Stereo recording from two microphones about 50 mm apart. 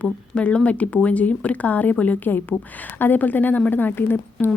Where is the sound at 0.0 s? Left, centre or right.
Left.